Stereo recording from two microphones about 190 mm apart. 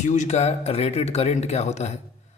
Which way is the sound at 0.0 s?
40° left (ahead or behind).